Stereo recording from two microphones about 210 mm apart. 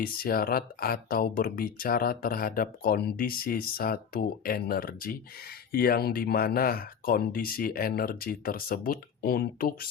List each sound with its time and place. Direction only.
0.0 s speech: 45° left (ahead or behind)